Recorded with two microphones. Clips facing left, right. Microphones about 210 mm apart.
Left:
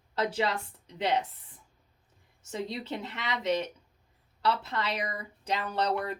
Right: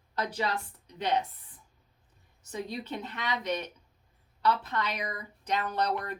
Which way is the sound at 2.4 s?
25° left (ahead or behind).